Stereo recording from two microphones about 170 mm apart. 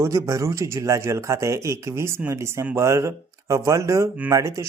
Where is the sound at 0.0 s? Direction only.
15° right (ahead or behind).